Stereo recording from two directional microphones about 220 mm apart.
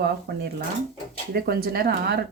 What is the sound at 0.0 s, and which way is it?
Speech, 50° right (ahead or behind).